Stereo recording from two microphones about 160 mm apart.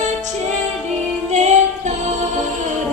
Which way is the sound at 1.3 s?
45° right (ahead or behind).